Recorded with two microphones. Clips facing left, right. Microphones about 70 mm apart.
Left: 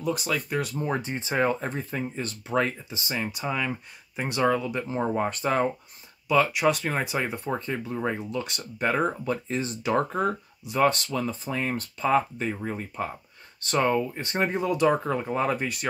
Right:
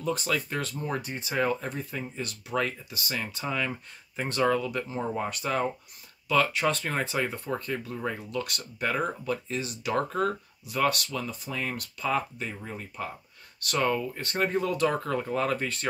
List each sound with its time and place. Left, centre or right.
0.0 s speech: centre
0.6 s speech: centre
4.8 s speech: left
6.2 s speech: centre